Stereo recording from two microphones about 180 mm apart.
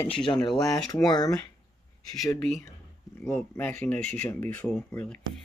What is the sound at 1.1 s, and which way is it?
Speech, 20° left (ahead or behind).